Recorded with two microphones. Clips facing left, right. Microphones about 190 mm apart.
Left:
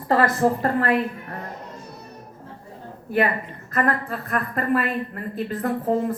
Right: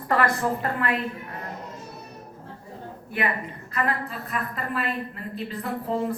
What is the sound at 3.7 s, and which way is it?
A woman's voice, 55° left (ahead or behind).